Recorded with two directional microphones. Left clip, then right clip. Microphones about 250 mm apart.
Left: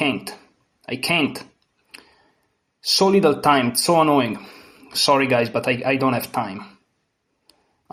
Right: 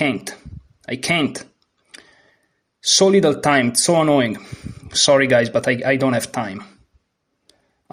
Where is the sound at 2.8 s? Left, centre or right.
Right.